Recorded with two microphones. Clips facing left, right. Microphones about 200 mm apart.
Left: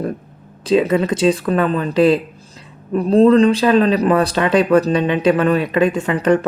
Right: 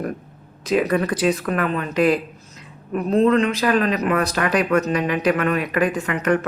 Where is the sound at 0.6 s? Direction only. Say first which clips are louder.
Left 4 dB; 25° left (ahead or behind).